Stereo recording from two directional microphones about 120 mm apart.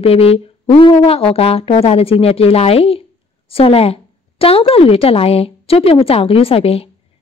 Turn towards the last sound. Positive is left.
turn(degrees=55)  # may be behind; listen again after turning